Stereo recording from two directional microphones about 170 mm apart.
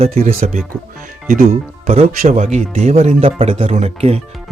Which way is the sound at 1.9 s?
45° right (ahead or behind).